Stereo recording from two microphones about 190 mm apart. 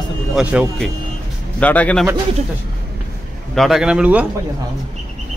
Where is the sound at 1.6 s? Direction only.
5° left (ahead or behind).